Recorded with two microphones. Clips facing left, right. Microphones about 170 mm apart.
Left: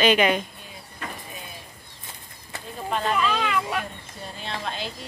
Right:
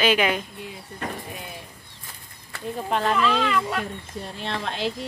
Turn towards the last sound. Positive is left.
turn(degrees=-70)  # may be behind; listen again after turning